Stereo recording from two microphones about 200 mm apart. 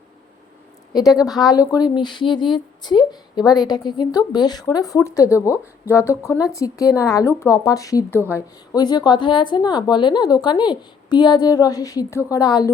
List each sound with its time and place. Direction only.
0.9 s a woman's voice: 20° left (ahead or behind)